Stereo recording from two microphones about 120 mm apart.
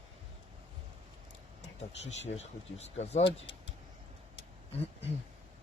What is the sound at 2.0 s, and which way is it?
Speech, 65° left (ahead or behind).